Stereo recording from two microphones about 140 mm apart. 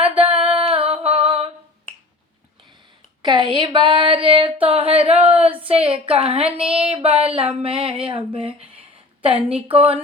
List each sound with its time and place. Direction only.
0.2 s female singing: 40° right (ahead or behind)
3.2 s a sound: 35° right (ahead or behind)
5.1 s speech: 10° right (ahead or behind)
5.4 s speech: 40° right (ahead or behind)
6.9 s a sound: 45° right (ahead or behind)
9.2 s speech: 40° right (ahead or behind)